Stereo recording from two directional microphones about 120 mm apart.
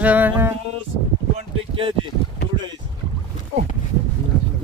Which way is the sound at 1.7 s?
45° right (ahead or behind).